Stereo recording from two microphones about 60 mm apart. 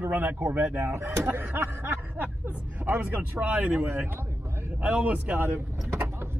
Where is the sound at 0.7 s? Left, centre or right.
Right.